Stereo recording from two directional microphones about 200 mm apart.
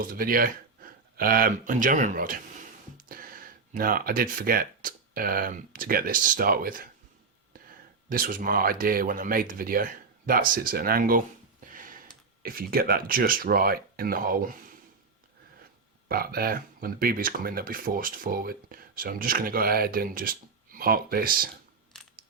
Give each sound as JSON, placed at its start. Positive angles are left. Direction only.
{"t": 0.0, "sound": "speech", "side_deg": -45}
{"t": 8.1, "sound": "speech", "side_deg": -45}
{"t": 11.7, "sound": "a sound", "side_deg": -45}
{"t": 12.4, "sound": "speech", "side_deg": -45}
{"t": 16.0, "sound": "speech", "side_deg": -50}